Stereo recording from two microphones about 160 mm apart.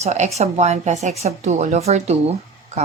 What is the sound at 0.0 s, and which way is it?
Speech, 45° right (ahead or behind).